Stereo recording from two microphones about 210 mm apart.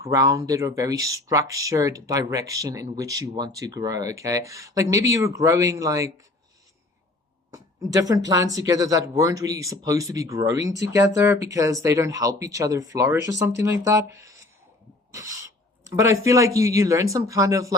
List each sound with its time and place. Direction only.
0.0 s speech: 15° right (ahead or behind)
7.5 s speech: 15° right (ahead or behind)
15.1 s owl: 15° right (ahead or behind)
15.8 s speech: 15° right (ahead or behind)